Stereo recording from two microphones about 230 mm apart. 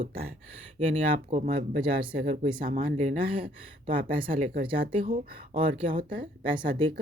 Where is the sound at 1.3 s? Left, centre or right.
Right.